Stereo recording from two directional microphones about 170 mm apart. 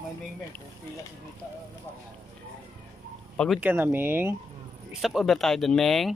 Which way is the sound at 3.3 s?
Centre (ahead or behind).